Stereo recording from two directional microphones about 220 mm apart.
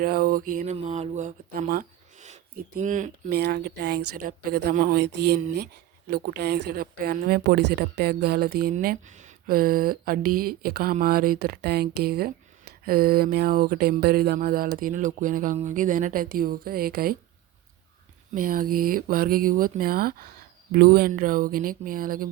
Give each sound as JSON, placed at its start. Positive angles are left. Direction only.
{"t": 0.0, "sound": "speech", "side_deg": -40}
{"t": 4.1, "sound": "a sound", "side_deg": -45}
{"t": 7.7, "sound": "speech", "side_deg": -50}
{"t": 10.6, "sound": "a sound", "side_deg": -40}
{"t": 14.8, "sound": "speech", "side_deg": -40}
{"t": 18.3, "sound": "speech", "side_deg": -40}